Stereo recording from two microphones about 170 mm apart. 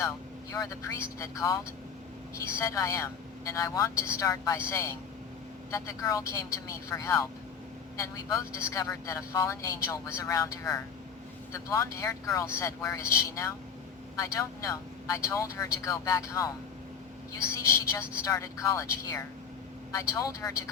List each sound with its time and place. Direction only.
0.5 s a man's voice: 20° left (ahead or behind)
17.5 s a man's voice: 15° left (ahead or behind)